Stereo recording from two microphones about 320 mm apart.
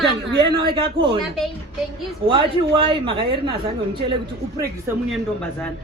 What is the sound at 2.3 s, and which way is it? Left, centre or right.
A woman's voice, centre.